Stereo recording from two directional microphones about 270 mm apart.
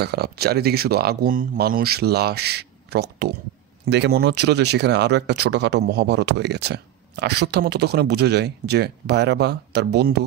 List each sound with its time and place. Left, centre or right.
0.0 s speech: right